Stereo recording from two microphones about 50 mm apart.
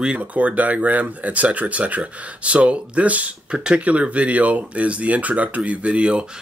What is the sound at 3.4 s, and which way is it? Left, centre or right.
Speech, centre.